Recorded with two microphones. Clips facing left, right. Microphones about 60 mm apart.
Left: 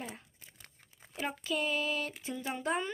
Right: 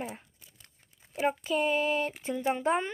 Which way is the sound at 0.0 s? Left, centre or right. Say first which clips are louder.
Right 5 dB; centre.